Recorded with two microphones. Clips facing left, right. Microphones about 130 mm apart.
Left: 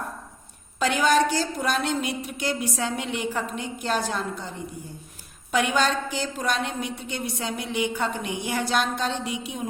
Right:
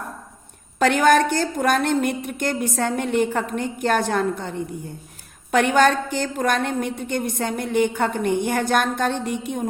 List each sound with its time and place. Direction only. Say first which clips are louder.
0.8 s a woman's voice: right 5 dB; 55° right (ahead or behind)